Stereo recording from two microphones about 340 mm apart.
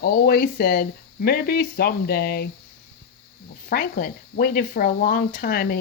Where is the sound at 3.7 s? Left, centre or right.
Left.